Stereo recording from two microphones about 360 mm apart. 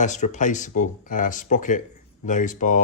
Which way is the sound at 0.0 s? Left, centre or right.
Centre.